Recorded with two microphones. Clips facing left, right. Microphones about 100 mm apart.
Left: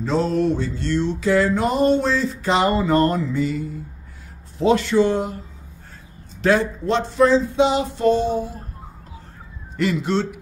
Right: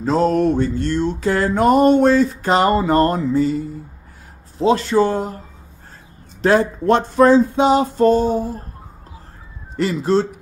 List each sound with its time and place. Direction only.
0.0 s music: 45° right (ahead or behind)
4.6 s speech: 35° right (ahead or behind)
6.4 s music: 45° right (ahead or behind)
9.8 s speech: 35° right (ahead or behind)